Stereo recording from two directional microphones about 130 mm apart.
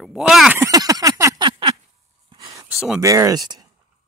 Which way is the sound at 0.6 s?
30° right (ahead or behind).